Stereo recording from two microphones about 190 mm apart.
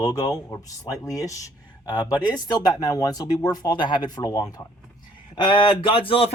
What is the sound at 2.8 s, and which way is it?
Speech, 20° left (ahead or behind).